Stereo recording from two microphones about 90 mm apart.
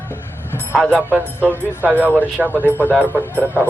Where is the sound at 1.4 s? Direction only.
25° left (ahead or behind).